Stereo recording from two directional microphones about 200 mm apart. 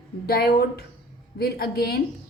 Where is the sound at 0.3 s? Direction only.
50° left (ahead or behind).